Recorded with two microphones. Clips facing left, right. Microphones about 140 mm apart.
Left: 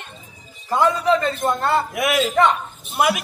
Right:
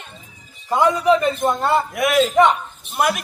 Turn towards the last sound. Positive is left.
turn(degrees=0)  # may be behind; listen again after turning